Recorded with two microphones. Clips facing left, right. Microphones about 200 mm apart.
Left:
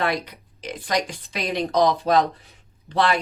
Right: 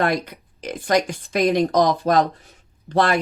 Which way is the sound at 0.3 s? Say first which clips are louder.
Right 3 dB; 50° right (ahead or behind).